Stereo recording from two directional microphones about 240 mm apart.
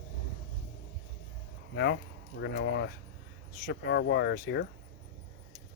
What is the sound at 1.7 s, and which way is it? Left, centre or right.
Speech, left.